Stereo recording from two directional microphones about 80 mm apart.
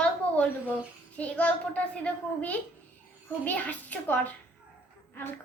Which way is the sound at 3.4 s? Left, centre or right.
Centre.